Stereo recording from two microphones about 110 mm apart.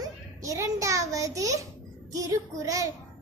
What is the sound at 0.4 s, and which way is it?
A child's voice, 30° right (ahead or behind).